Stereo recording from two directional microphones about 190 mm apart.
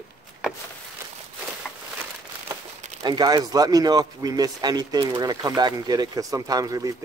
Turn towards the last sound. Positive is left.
turn(degrees=-20)  # may be behind; listen again after turning